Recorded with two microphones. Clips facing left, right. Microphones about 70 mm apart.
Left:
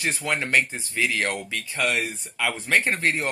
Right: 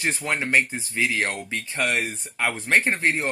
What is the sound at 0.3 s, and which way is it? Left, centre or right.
Speech, right.